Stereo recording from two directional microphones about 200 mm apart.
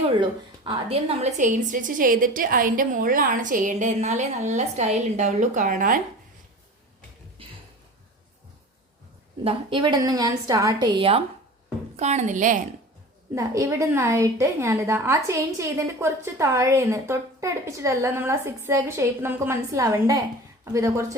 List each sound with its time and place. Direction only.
0.2 s a woman's voice: 25° right (ahead or behind)
1.4 s a woman's voice: 40° right (ahead or behind)
7.4 s a sound: 25° right (ahead or behind)
9.4 s a woman's voice: 25° right (ahead or behind)
13.3 s a woman's voice: 15° right (ahead or behind)